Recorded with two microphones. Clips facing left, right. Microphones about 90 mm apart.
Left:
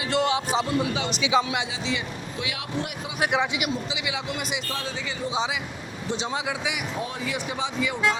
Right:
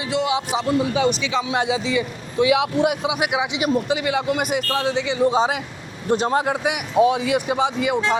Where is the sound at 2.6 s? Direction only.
90° right.